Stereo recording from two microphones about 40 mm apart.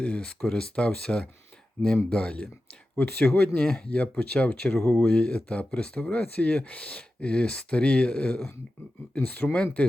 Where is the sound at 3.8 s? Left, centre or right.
Left.